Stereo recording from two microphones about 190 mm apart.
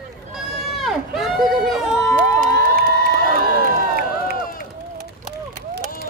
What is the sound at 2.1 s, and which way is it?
Cheering, 45° right (ahead or behind).